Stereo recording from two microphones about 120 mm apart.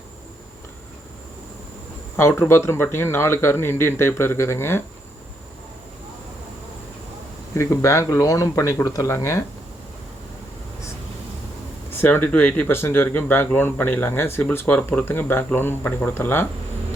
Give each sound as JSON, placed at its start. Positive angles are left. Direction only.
{"t": 2.1, "sound": "speech", "side_deg": 20}
{"t": 7.5, "sound": "speech", "side_deg": 25}
{"t": 11.9, "sound": "speech", "side_deg": 15}